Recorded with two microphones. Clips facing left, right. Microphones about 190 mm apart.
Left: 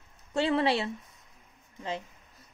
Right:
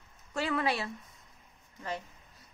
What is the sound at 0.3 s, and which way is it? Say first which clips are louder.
Speech: left 5 dB; 30° left (ahead or behind).